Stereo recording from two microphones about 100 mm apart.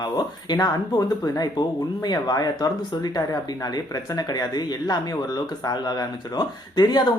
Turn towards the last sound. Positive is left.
turn(degrees=45)  # may be behind; listen again after turning